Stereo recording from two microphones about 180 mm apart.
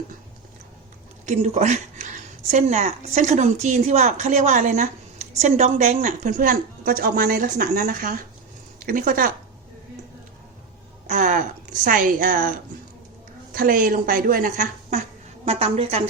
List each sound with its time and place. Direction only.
1.2 s a woman's voice: 45° right (ahead or behind)
11.0 s a woman's voice: 45° right (ahead or behind)